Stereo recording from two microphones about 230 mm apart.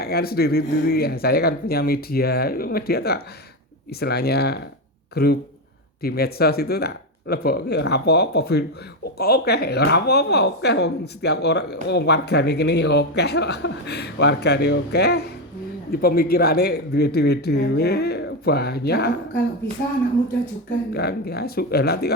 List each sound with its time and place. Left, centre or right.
0.0 s speech: left
20.9 s speech: left